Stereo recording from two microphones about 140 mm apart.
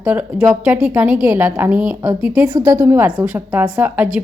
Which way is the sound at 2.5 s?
25° right (ahead or behind).